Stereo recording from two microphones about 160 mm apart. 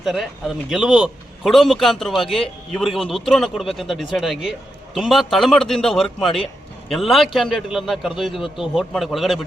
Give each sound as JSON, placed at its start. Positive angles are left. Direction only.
{"t": 0.0, "sound": "a man's voice", "side_deg": 0}